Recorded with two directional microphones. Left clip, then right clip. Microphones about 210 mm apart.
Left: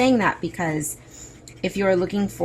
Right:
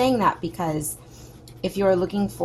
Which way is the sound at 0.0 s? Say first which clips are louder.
Left 1 dB; 20° left (ahead or behind).